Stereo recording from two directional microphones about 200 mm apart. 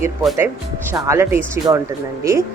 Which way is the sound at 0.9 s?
15° right (ahead or behind).